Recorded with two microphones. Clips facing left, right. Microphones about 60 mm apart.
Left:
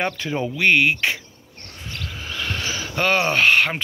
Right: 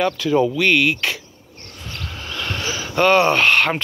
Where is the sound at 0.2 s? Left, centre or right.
Left.